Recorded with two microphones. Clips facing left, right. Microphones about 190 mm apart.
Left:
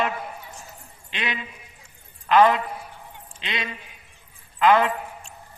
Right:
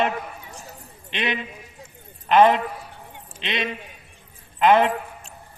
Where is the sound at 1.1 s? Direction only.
20° right (ahead or behind).